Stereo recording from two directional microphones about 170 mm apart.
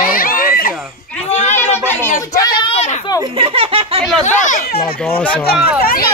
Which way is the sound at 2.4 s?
25° left (ahead or behind).